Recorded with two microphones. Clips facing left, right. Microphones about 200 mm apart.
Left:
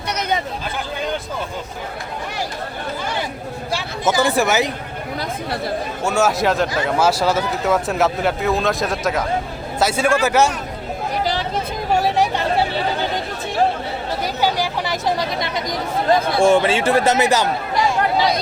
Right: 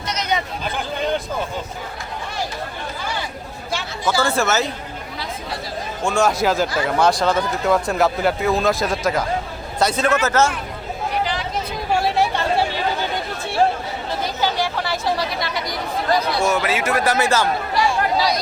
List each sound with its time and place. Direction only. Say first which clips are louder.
3.7 s a man's voice: left 2 dB; 15° left (ahead or behind)
5.2 s speech: left 4 dB; 55° left (ahead or behind)
6.0 s a man's voice: even; 5° left (ahead or behind)
11.1 s chatter: left 2 dB; 40° left (ahead or behind)
12.1 s chatter: left 1 dB; 15° left (ahead or behind)
14.4 s chatter: left 2 dB; 15° left (ahead or behind)
16.4 s speech: left 5 dB; 30° left (ahead or behind)